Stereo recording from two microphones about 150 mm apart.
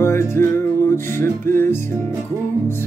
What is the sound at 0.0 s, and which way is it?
Music, 15° left (ahead or behind).